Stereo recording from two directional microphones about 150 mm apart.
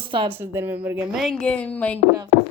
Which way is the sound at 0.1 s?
35° right (ahead or behind).